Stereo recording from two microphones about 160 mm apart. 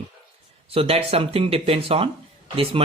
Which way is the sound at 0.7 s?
35° right (ahead or behind).